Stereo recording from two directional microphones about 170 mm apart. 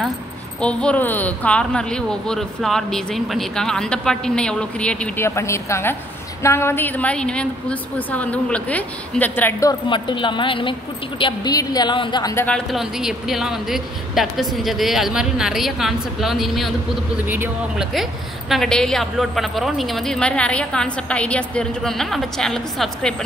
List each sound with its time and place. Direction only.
0.6 s a woman's voice: 5° left (ahead or behind); by 12.4 s 20° left (ahead or behind)
12.4 s speech: 5° left (ahead or behind)